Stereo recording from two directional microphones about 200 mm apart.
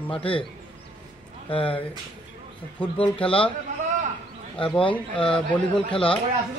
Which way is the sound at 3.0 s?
25° left (ahead or behind).